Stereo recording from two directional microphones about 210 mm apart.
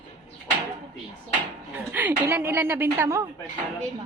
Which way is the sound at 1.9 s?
10° right (ahead or behind).